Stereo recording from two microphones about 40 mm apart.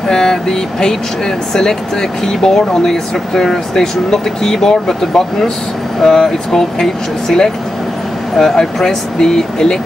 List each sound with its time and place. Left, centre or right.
0.1 s speech: centre